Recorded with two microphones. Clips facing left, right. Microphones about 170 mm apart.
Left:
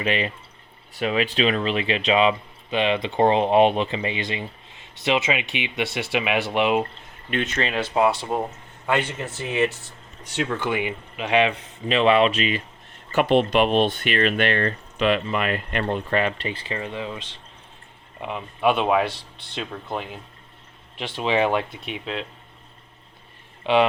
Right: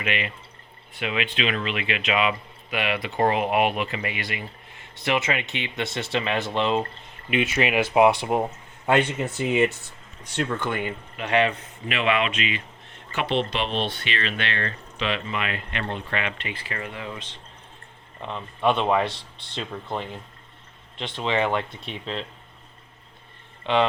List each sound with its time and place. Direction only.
0.0 s speech: 35° left (ahead or behind); by 6.8 s 15° left (ahead or behind)
7.3 s speech: 10° right (ahead or behind)
10.3 s speech: 5° left (ahead or behind)
11.9 s speech: 30° left (ahead or behind)
18.2 s speech: 10° left (ahead or behind)
23.6 s speech: 15° left (ahead or behind)